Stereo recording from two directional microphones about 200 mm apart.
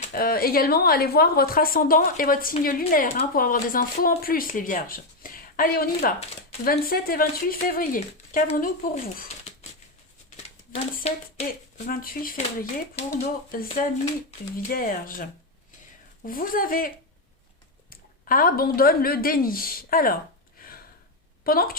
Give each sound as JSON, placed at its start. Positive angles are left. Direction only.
{"t": 0.1, "sound": "a woman's voice", "side_deg": 50}
{"t": 11.1, "sound": "speech", "side_deg": 30}
{"t": 11.9, "sound": "a woman's voice", "side_deg": 45}
{"t": 20.6, "sound": "a sound", "side_deg": 45}
{"t": 21.4, "sound": "a woman's voice", "side_deg": 45}